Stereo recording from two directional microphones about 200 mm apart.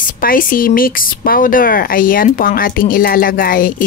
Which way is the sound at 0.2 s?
45° left (ahead or behind).